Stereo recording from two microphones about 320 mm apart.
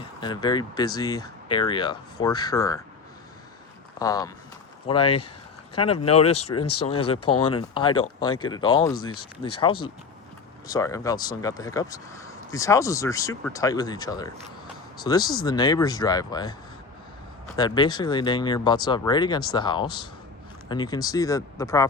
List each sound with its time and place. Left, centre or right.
0.2 s speech: centre
4.0 s speech: centre
5.0 s speech: left
6.1 s speech: centre
6.6 s speech: left
7.4 s speech: centre
8.9 s speech: left
10.7 s speech: centre
17.6 s speech: centre